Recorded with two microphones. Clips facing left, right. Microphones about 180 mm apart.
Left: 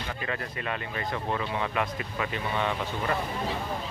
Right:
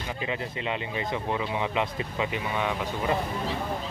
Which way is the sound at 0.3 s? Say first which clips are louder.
Right 2 dB; 15° right (ahead or behind).